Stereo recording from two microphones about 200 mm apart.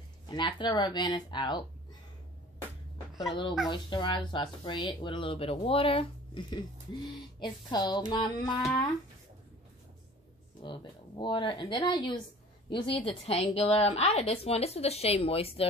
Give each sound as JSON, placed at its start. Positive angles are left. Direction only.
{"t": 0.3, "sound": "a woman's voice", "side_deg": 25}
{"t": 3.2, "sound": "a woman's voice", "side_deg": 25}
{"t": 10.6, "sound": "a woman's voice", "side_deg": 25}